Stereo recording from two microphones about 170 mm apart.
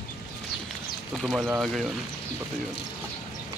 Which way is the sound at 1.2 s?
5° right (ahead or behind).